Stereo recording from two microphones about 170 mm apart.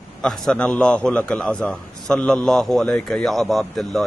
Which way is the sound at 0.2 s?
5° left (ahead or behind).